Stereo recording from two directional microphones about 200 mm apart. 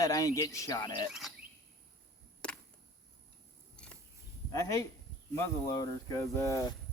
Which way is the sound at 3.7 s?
5° left (ahead or behind).